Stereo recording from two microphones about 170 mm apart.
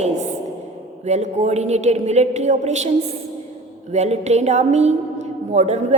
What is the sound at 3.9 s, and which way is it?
A woman's voice, 40° right (ahead or behind).